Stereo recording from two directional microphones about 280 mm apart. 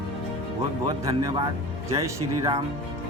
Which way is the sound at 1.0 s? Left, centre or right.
Centre.